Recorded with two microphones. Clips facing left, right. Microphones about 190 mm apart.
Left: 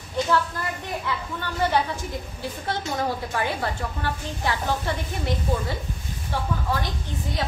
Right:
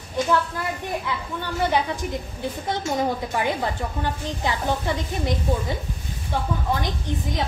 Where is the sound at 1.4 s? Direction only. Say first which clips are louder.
Right 1 dB; 15° right (ahead or behind).